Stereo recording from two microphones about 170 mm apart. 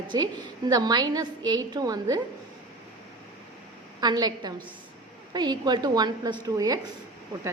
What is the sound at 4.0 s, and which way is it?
A woman's voice, 25° right (ahead or behind).